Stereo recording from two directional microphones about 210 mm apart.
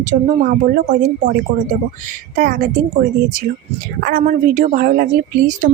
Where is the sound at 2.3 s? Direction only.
40° right (ahead or behind).